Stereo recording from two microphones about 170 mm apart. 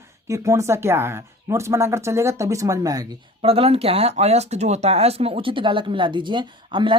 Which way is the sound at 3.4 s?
35° right (ahead or behind).